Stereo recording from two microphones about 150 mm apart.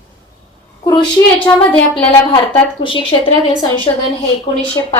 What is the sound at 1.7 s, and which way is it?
Speech, 10° left (ahead or behind).